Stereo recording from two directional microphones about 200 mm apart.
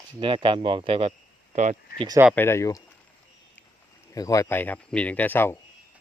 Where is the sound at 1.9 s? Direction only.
25° right (ahead or behind).